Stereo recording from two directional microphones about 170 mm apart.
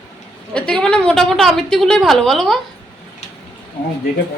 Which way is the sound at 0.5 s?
5° left (ahead or behind).